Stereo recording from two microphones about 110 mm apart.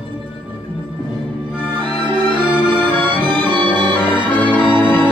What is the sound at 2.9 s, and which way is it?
Music, 45° right (ahead or behind).